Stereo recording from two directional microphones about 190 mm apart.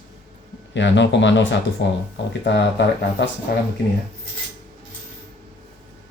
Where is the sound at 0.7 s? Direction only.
70° left (ahead or behind).